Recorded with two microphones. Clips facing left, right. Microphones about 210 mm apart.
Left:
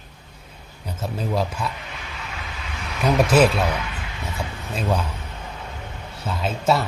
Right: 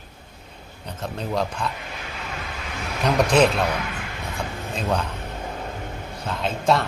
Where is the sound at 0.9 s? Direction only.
5° left (ahead or behind).